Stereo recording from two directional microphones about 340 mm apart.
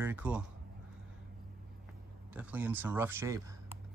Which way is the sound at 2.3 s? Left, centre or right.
Centre.